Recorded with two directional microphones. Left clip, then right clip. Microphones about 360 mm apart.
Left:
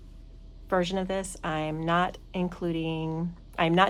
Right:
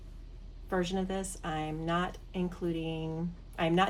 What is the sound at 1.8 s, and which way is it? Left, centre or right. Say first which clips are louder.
A woman's voice: left 10 dB; left.